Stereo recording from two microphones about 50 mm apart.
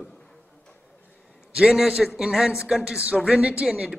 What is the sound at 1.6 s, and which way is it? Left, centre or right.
A man's voice, centre.